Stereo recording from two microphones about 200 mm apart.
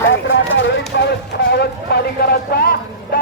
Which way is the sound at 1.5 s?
55° left (ahead or behind).